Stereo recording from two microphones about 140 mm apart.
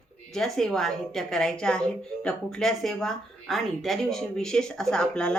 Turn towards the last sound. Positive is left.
turn(degrees=5)  # may be behind; listen again after turning